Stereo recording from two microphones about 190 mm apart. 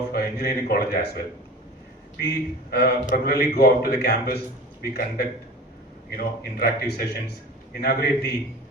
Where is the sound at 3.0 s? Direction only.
45° left (ahead or behind).